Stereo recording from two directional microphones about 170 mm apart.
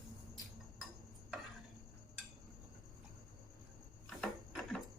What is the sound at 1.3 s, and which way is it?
Stir, centre (ahead or behind).